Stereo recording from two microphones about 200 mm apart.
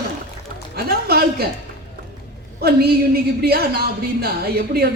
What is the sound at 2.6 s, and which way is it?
Speech, 50° right (ahead or behind).